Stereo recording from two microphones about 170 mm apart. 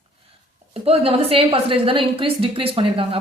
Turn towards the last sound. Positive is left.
turn(degrees=-35)  # may be behind; listen again after turning